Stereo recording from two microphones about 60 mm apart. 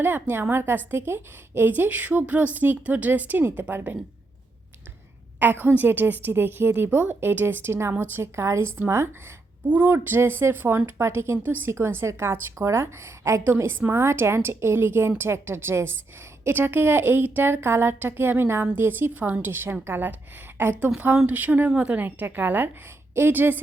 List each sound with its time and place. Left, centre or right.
0.0 s a woman's voice: right
5.4 s a woman's voice: right
9.6 s speech: right
9.9 s a woman's voice: right
11.0 s a woman's voice: right
11.4 s a woman's voice: right